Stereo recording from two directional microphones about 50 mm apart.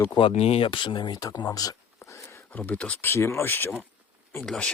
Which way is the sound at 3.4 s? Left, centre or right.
Left.